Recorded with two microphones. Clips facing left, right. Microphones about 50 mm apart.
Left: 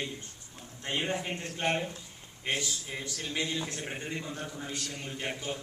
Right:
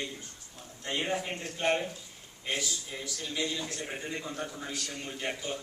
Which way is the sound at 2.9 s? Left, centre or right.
Centre.